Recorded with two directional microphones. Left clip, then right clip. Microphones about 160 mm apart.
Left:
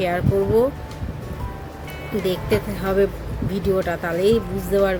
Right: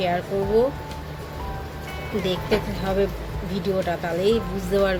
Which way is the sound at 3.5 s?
25° left (ahead or behind).